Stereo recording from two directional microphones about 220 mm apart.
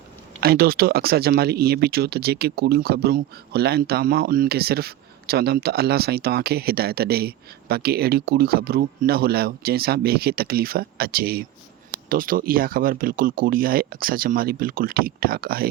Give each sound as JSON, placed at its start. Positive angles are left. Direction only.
{"t": 0.3, "sound": "speech", "side_deg": -45}